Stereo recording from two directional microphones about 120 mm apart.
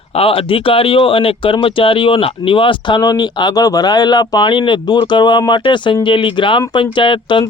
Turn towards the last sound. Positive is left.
turn(degrees=45)  # may be behind; listen again after turning